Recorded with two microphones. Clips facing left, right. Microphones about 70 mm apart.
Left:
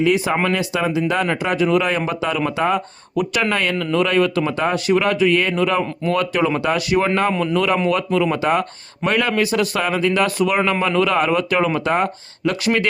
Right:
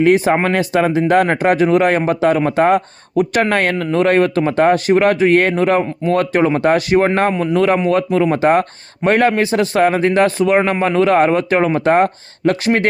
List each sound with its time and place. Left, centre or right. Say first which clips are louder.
0.0 s a man's voice: right 5 dB; right
11.9 s speech: right 6 dB; right